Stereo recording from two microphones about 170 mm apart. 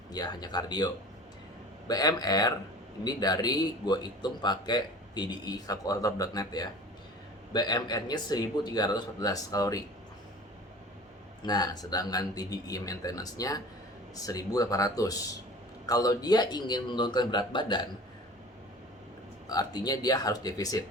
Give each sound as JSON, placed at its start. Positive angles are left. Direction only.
{"t": 0.1, "sound": "speech", "side_deg": 25}
{"t": 1.9, "sound": "speech", "side_deg": 20}
{"t": 11.4, "sound": "speech", "side_deg": 25}
{"t": 19.5, "sound": "speech", "side_deg": 25}